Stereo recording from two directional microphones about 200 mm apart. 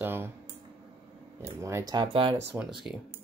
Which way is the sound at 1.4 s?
15° right (ahead or behind).